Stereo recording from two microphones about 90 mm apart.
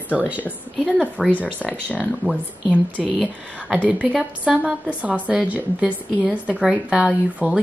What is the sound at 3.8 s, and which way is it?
A woman's voice, 15° right (ahead or behind).